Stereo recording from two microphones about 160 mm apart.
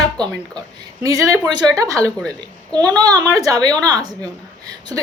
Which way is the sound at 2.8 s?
25° right (ahead or behind).